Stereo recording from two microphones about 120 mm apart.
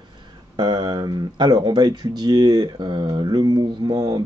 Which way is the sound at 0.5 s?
35° right (ahead or behind).